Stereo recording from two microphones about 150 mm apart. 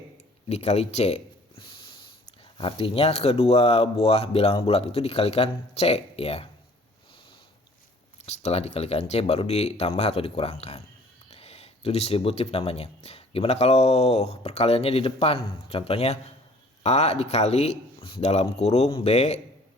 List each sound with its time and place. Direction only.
0.4 s speech: 45° left (ahead or behind)
8.3 s speech: 45° left (ahead or behind)